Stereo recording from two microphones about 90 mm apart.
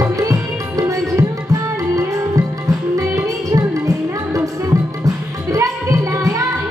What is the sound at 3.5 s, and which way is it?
Music, 40° right (ahead or behind).